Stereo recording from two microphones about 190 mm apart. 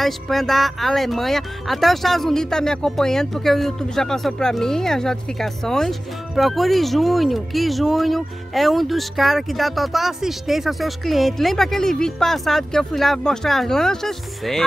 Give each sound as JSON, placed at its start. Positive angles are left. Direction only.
{"t": 0.0, "sound": "speech", "side_deg": 0}